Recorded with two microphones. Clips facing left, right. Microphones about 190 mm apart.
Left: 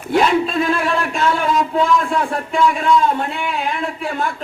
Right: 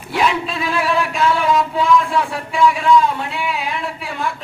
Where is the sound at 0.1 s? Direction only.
50° left (ahead or behind).